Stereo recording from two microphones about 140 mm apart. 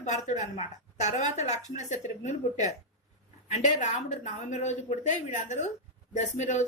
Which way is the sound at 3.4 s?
60° left (ahead or behind).